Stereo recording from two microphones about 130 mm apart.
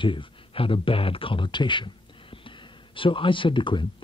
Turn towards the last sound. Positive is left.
turn(degrees=40)  # may be behind; listen again after turning